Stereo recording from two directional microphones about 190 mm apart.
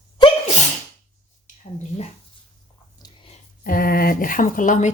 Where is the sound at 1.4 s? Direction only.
35° left (ahead or behind).